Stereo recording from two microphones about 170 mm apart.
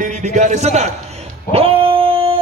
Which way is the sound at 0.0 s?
45° right (ahead or behind).